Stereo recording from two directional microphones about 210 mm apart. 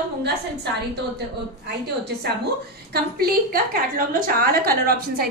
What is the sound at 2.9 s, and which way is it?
A woman's voice, 45° right (ahead or behind).